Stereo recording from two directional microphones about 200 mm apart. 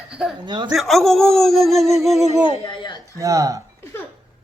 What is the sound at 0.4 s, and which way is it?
Speech, 20° right (ahead or behind).